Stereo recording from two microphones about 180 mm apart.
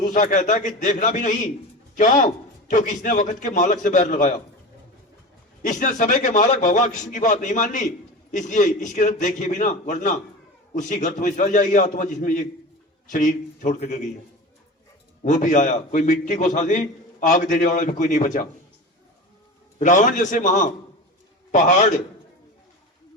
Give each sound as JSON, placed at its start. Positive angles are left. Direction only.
{"t": 0.0, "sound": "a man's voice", "side_deg": 45}
{"t": 5.6, "sound": "a man's voice", "side_deg": 45}
{"t": 15.2, "sound": "a man's voice", "side_deg": 45}
{"t": 19.8, "sound": "a man's voice", "side_deg": 45}